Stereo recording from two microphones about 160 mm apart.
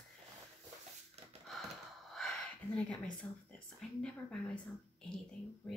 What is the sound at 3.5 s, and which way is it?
Speech, 5° left (ahead or behind).